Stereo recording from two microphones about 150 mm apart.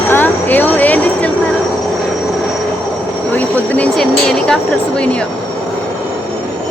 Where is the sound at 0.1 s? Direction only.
10° left (ahead or behind).